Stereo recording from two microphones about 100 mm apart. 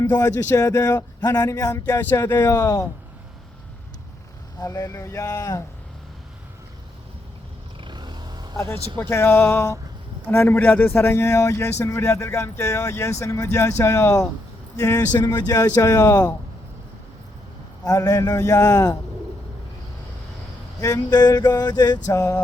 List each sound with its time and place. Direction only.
0.0 s speech: 35° left (ahead or behind)
4.6 s speech: 35° left (ahead or behind)
7.8 s vehicle: 50° right (ahead or behind)
8.5 s a man's voice: 25° left (ahead or behind)
17.8 s speech: 40° left (ahead or behind)
20.8 s a sound: 40° left (ahead or behind)